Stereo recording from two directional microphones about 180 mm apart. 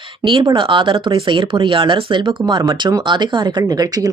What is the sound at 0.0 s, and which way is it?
Speech, 25° right (ahead or behind).